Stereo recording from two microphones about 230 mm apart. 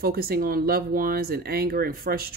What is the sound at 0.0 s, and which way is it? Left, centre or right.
Speech, right.